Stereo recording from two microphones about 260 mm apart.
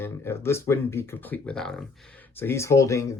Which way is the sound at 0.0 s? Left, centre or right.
Centre.